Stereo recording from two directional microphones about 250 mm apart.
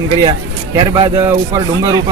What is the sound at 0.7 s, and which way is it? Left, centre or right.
Speech, centre.